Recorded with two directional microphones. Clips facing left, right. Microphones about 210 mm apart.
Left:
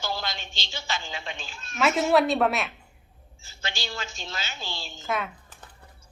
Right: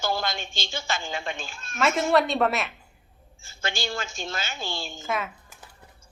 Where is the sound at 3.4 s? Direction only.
50° right (ahead or behind).